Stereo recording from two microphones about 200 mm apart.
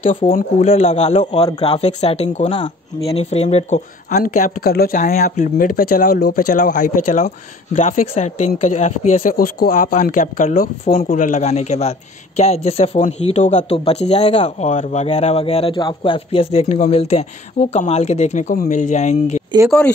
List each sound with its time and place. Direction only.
0.2 s speech: 35° left (ahead or behind)
4.2 s speech: 45° left (ahead or behind)